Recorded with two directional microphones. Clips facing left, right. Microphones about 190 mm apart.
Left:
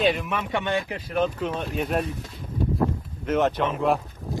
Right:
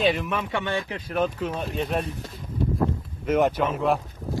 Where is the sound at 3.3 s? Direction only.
10° right (ahead or behind).